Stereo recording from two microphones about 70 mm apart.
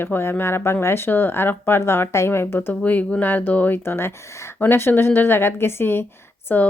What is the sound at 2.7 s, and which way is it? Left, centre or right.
Speech, left.